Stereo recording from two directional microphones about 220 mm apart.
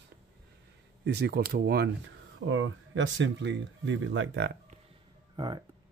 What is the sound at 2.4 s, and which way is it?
Speech, 60° right (ahead or behind).